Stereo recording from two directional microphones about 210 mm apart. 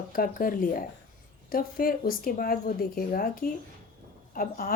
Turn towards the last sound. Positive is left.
turn(degrees=45)  # may be behind; listen again after turning